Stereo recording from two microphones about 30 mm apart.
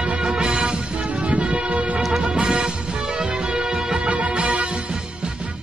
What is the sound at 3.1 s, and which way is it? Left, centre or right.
Music of bollywood, right.